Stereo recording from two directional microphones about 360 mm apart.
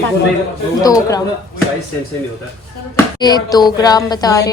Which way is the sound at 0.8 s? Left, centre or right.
Centre.